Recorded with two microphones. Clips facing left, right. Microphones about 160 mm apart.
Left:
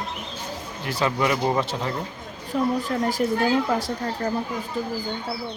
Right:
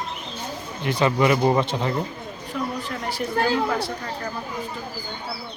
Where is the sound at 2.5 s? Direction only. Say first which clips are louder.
Left 5 dB; 35° left (ahead or behind).